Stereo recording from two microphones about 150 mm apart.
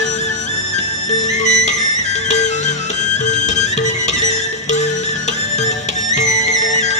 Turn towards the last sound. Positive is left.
turn(degrees=55)  # may be behind; listen again after turning